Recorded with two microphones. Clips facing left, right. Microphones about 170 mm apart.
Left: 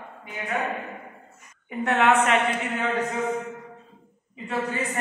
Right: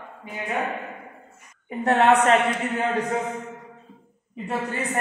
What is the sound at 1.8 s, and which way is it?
Speech, 35° right (ahead or behind).